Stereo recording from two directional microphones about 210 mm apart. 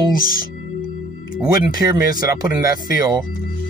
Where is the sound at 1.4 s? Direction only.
20° right (ahead or behind).